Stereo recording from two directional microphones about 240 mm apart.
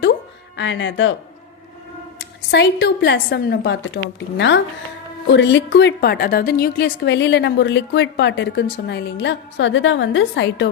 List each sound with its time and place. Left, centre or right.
0.5 s a woman's voice: left
2.5 s a woman's voice: left